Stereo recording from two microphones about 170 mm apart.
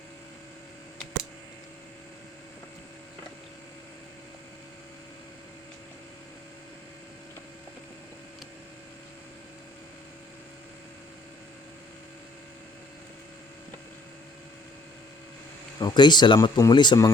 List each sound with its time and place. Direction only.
15.8 s speech: 25° left (ahead or behind)